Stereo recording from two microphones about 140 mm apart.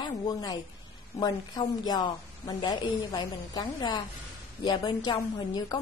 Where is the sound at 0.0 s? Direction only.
30° left (ahead or behind).